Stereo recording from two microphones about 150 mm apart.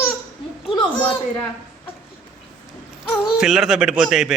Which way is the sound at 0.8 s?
35° left (ahead or behind).